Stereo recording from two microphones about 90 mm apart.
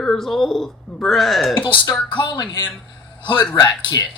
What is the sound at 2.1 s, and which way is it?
Speech, 55° left (ahead or behind).